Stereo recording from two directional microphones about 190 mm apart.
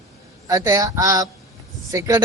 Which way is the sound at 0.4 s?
15° right (ahead or behind).